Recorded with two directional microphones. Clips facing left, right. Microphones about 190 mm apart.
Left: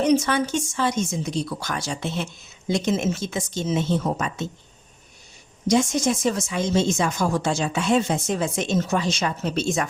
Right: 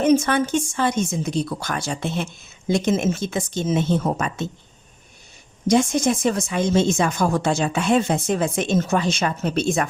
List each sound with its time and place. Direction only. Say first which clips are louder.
0.0 s a woman's voice: right 2 dB; 50° right (ahead or behind)
5.6 s speech: right 2 dB; 55° right (ahead or behind)